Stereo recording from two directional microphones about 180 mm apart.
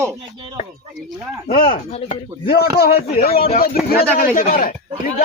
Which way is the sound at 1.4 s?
50° left (ahead or behind).